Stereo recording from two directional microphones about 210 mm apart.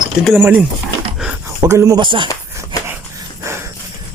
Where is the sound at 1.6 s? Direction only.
15° right (ahead or behind).